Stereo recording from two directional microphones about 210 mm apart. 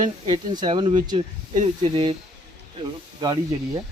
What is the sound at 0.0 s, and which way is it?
Speech, 20° right (ahead or behind).